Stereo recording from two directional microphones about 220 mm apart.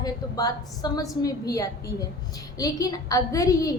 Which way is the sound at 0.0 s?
15° left (ahead or behind).